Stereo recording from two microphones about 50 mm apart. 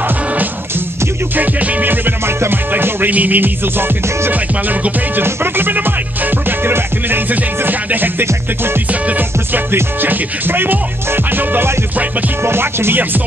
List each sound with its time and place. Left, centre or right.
1.3 s music: right
2.7 s music: right
5.2 s music: right
12.4 s music: right